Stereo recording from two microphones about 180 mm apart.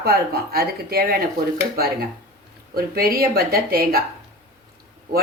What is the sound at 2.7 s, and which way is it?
A woman's voice, 60° right (ahead or behind).